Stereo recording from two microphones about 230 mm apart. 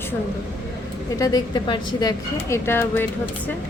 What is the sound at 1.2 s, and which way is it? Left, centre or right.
Speech, centre.